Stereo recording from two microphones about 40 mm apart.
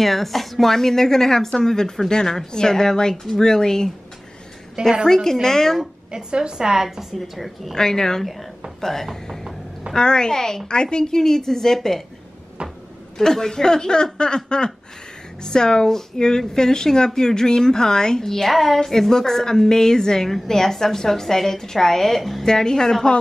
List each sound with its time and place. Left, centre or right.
0.0 s speech: centre
4.8 s a woman's voice: right
5.1 s speech: centre
6.1 s a woman's voice: right
7.2 s a woman's voice: centre
7.7 s speech: centre
9.9 s a woman's voice: centre
13.2 s a woman's voice: centre
22.5 s speech: centre